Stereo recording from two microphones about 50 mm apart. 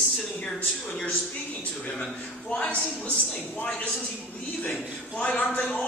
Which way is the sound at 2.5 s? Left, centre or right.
Left.